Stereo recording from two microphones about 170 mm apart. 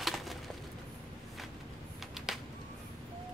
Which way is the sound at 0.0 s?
Centre (ahead or behind).